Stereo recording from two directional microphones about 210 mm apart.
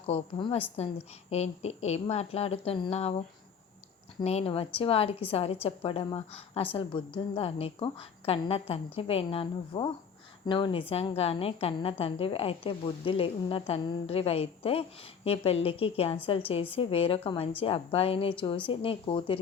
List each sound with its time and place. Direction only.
0.1 s a woman's voice: 25° left (ahead or behind)